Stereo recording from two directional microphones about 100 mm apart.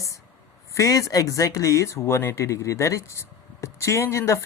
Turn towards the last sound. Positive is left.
turn(degrees=30)  # may be behind; listen again after turning